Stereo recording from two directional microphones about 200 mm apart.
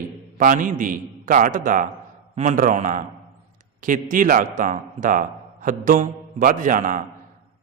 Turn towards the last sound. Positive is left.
turn(degrees=-40)  # may be behind; listen again after turning